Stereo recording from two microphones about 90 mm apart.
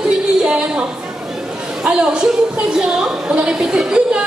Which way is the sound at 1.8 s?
10° right (ahead or behind).